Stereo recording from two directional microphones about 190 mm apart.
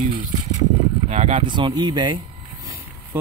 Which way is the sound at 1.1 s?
35° right (ahead or behind).